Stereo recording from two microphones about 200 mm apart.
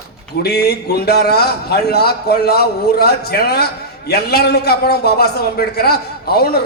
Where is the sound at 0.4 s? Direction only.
55° left (ahead or behind).